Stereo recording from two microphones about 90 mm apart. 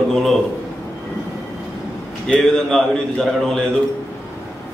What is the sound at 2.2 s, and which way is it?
A man's voice, 5° left (ahead or behind).